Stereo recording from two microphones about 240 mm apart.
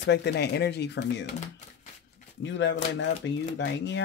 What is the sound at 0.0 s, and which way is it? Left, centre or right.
Speech, left.